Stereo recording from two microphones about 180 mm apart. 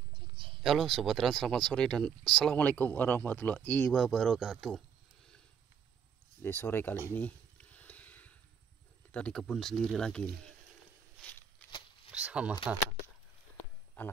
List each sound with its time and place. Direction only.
0.1 s a sound: 30° right (ahead or behind)
0.6 s speech: centre (ahead or behind)
6.4 s speech: 10° left (ahead or behind)
7.1 s a sound: 10° left (ahead or behind)
9.1 s speech: 5° left (ahead or behind)
12.1 s speech: 5° right (ahead or behind)
14.0 s speech: 10° left (ahead or behind)